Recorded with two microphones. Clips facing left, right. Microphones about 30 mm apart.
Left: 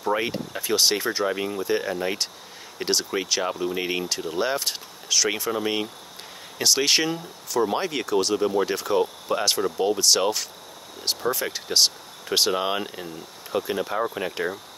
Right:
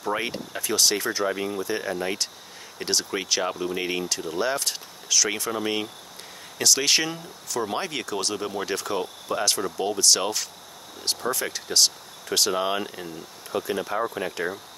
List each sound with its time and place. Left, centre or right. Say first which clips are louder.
0.0 s speech: left 3 dB; centre
0.6 s speech: left 1 dB; centre